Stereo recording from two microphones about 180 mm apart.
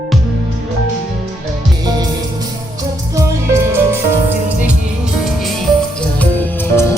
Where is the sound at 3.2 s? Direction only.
15° right (ahead or behind).